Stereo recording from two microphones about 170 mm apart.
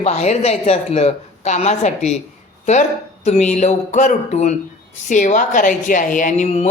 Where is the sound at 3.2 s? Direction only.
40° left (ahead or behind).